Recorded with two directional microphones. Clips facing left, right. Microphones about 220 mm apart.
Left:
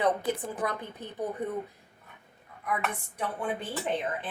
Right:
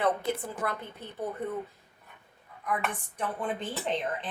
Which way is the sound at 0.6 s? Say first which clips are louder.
Left 1 dB; 15° left (ahead or behind).